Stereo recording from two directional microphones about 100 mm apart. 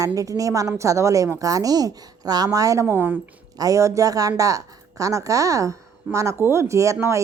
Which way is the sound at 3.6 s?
30° right (ahead or behind).